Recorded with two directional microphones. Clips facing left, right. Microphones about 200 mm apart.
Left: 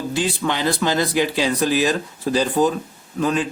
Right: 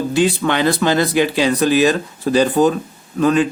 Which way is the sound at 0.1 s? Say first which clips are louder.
Right 6 dB; 65° right (ahead or behind).